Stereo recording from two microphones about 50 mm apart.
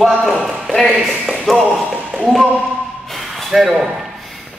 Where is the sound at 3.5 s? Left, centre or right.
Centre.